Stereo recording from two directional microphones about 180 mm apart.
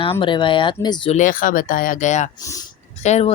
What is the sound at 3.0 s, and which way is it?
Speech, 35° left (ahead or behind).